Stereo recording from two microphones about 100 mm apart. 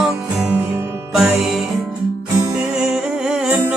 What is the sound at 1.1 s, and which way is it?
Music, 5° right (ahead or behind).